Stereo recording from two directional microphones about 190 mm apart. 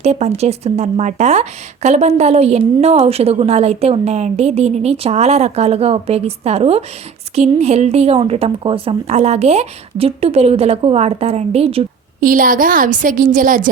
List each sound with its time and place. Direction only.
0.0 s speech: 35° right (ahead or behind)
12.2 s a woman's voice: 45° right (ahead or behind)